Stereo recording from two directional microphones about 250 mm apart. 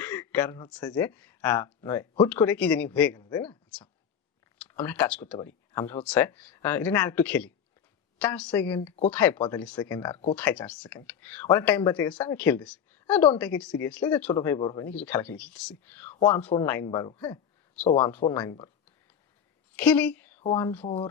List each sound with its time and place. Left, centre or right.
0.0 s a sound: centre
0.8 s speech: centre
19.7 s speech: centre
20.8 s speech: left